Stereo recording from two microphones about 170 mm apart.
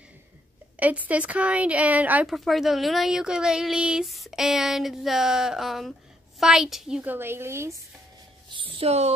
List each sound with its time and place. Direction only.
0.7 s a woman's voice: 10° right (ahead or behind)
8.5 s speech: 30° right (ahead or behind)